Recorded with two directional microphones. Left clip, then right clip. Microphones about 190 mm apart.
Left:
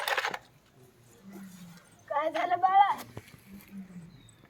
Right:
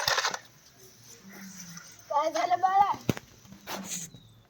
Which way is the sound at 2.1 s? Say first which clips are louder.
Right 2 dB; centre (ahead or behind).